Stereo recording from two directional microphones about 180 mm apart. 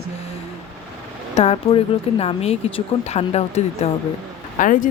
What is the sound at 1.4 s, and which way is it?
Speech, 35° left (ahead or behind).